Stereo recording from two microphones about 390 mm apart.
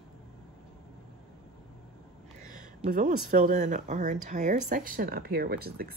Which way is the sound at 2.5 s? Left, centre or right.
Right.